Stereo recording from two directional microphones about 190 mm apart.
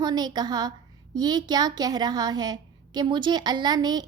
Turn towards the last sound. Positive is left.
turn(degrees=-20)  # may be behind; listen again after turning